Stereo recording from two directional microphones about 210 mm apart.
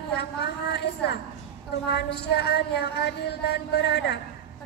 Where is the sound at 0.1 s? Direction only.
50° left (ahead or behind).